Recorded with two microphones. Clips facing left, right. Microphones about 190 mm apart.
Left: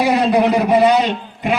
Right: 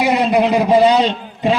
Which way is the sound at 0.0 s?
20° right (ahead or behind).